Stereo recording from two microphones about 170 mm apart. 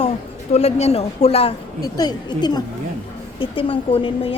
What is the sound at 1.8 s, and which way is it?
A woman's voice, 25° left (ahead or behind).